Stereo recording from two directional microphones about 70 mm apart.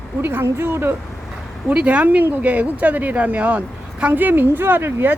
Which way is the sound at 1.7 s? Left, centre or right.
Centre.